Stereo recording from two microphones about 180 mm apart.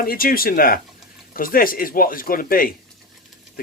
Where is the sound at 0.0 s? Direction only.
55° left (ahead or behind).